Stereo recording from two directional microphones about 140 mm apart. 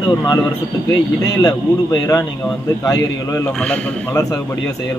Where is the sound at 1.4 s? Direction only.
25° left (ahead or behind).